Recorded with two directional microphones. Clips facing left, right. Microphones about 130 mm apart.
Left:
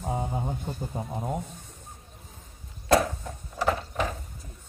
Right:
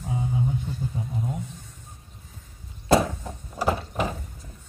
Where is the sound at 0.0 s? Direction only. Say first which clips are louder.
Right 2 dB; 45° left (ahead or behind).